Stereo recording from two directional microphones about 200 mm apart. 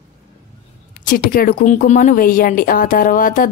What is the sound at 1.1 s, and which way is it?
Speech, 45° left (ahead or behind).